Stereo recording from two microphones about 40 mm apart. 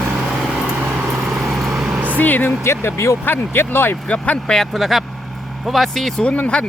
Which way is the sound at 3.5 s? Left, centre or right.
Left.